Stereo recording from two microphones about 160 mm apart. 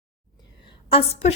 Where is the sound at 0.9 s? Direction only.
40° left (ahead or behind).